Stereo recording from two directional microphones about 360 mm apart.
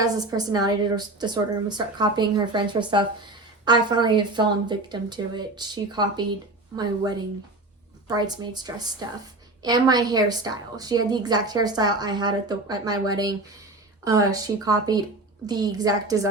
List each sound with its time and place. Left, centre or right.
0.0 s a woman's voice: centre